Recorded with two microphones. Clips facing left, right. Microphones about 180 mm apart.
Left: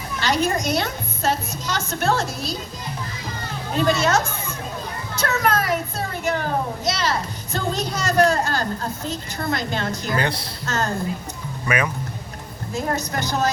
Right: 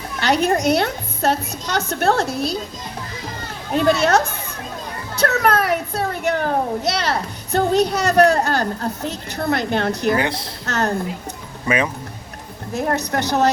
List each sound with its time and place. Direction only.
0.2 s a woman's voice: 60° right (ahead or behind)
3.8 s a woman's voice: 60° right (ahead or behind)
10.2 s a woman's voice: 20° right (ahead or behind)
10.7 s a woman's voice: 65° right (ahead or behind)
12.7 s a woman's voice: 65° right (ahead or behind)